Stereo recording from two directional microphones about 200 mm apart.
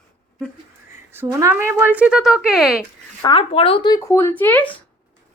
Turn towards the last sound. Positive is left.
turn(degrees=10)  # may be behind; listen again after turning